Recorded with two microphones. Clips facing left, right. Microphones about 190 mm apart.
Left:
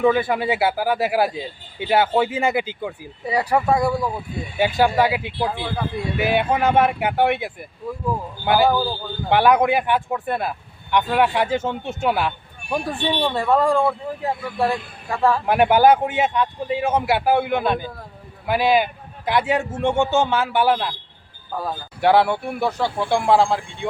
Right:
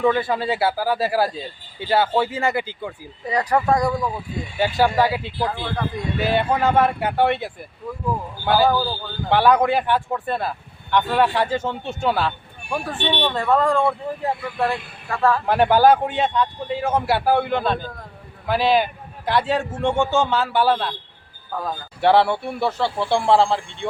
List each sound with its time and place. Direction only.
0.0 s speech: 15° left (ahead or behind)